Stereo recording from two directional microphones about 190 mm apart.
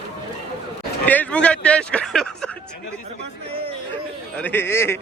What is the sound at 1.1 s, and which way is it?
Speech, 5° left (ahead or behind).